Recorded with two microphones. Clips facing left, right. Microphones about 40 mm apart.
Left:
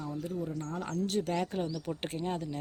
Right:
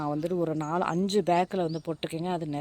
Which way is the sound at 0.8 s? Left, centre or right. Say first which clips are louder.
Right 6 dB; right.